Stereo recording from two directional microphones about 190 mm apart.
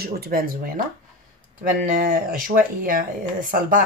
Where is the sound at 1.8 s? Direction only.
45° right (ahead or behind).